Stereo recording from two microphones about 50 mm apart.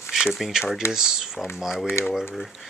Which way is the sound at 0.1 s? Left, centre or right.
Centre.